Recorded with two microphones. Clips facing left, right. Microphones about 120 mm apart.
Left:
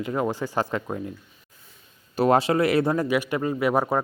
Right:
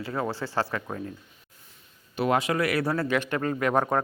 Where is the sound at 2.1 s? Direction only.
40° left (ahead or behind); by 4.0 s 10° left (ahead or behind).